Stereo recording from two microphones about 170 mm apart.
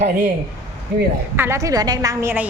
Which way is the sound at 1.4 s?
15° right (ahead or behind).